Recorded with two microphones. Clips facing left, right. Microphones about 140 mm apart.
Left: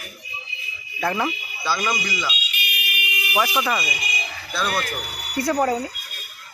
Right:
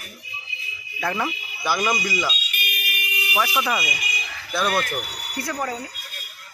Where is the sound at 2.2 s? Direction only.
45° right (ahead or behind).